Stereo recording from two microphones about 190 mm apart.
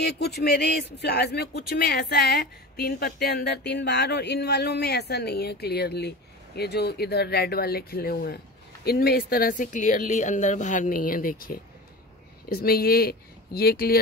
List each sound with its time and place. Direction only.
0.0 s speech: 60° left (ahead or behind)